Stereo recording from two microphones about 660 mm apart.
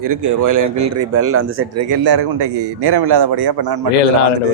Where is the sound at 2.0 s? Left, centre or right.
Right.